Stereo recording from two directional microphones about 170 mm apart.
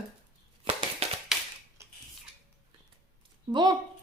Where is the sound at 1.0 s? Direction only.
35° right (ahead or behind).